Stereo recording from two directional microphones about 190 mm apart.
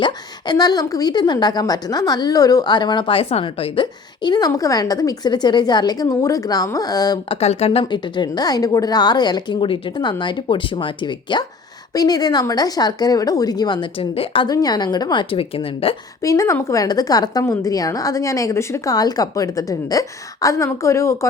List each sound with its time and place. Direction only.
0.0 s a woman's voice: 20° left (ahead or behind)
7.3 s a woman's voice: 35° left (ahead or behind)
16.2 s a woman's voice: 15° left (ahead or behind)